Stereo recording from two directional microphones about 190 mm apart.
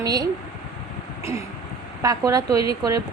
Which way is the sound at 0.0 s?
20° right (ahead or behind).